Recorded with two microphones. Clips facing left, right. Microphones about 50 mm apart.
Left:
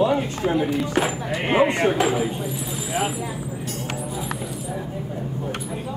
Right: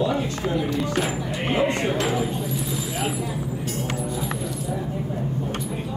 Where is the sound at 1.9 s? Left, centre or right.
Centre.